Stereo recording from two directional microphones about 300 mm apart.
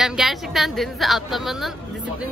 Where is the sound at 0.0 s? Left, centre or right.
Centre.